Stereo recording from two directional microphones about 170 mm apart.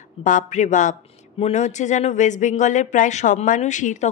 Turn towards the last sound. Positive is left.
turn(degrees=45)  # may be behind; listen again after turning